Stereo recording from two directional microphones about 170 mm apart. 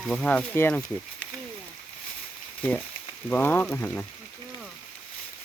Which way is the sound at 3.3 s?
10° left (ahead or behind).